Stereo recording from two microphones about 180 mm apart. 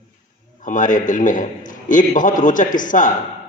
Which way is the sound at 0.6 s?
45° left (ahead or behind).